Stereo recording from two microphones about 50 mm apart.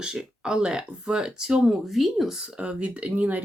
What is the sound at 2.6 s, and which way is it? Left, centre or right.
Speech, right.